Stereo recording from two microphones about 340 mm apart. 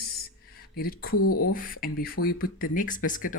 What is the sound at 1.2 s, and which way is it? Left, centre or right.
Speech, left.